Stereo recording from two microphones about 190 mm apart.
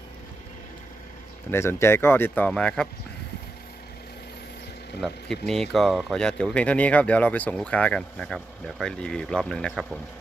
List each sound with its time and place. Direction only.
1.5 s speech: 15° left (ahead or behind)
4.9 s speech: centre (ahead or behind)